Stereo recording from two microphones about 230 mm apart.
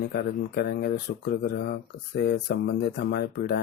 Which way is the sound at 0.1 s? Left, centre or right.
Left.